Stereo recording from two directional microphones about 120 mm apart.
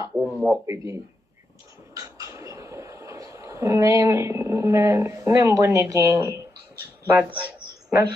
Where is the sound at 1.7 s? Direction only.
25° right (ahead or behind).